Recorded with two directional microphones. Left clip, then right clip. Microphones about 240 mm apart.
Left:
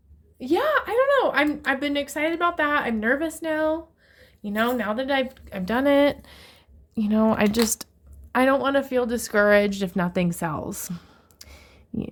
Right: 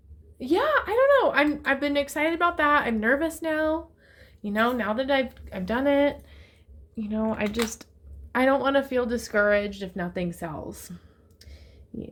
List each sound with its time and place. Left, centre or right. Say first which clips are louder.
0.3 s a woman's voice: left 1 dB; centre; by 7.9 s left
8.3 s speech: left 2 dB; centre; by 12.0 s left